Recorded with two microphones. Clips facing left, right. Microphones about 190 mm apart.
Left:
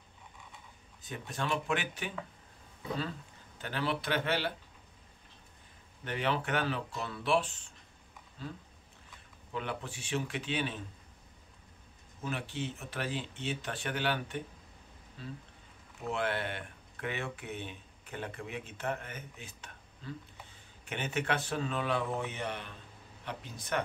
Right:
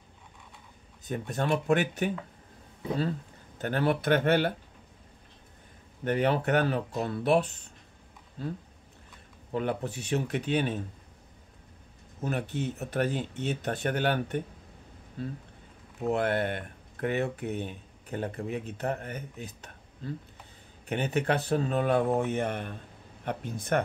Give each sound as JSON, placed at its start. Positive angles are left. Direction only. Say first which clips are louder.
{"t": 1.0, "sound": "speech", "louder": "right 7 dB", "side_deg": -40}
{"t": 6.0, "sound": "speech", "louder": "right 7 dB", "side_deg": -45}
{"t": 9.5, "sound": "speech", "louder": "right 8 dB", "side_deg": -45}
{"t": 12.2, "sound": "speech", "louder": "right 6 dB", "side_deg": -45}
{"t": 16.1, "sound": "speech", "louder": "right 7 dB", "side_deg": -45}